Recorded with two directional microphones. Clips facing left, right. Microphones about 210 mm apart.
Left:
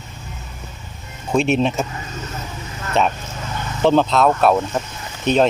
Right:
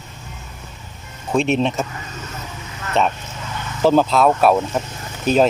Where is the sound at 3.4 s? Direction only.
40° left (ahead or behind).